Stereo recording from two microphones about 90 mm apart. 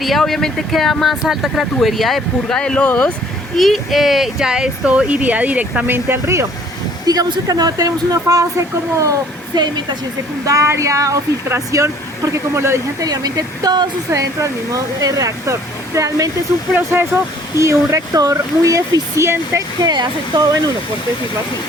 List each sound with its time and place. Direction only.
0.0 s speech: centre (ahead or behind); by 3.1 s 20° left (ahead or behind)
3.6 s speech: centre (ahead or behind); by 6.4 s 25° right (ahead or behind)
7.0 s speech: 45° right (ahead or behind)
10.4 s speech: 35° right (ahead or behind)
13.1 s speech: 45° right (ahead or behind)
16.7 s speech: 20° right (ahead or behind)
17.6 s speech: 35° right (ahead or behind)
19.8 s speech: 50° right (ahead or behind)